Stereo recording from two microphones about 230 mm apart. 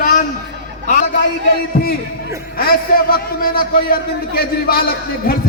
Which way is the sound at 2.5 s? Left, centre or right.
Left.